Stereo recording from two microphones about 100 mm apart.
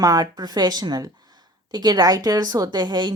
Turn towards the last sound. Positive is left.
turn(degrees=-45)  # may be behind; listen again after turning